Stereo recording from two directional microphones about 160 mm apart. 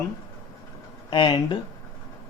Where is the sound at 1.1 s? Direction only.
30° left (ahead or behind).